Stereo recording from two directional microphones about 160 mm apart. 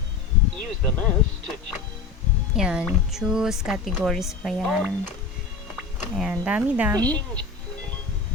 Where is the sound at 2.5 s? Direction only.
5° right (ahead or behind).